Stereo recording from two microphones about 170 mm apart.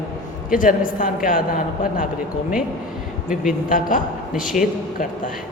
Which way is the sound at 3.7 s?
50° left (ahead or behind).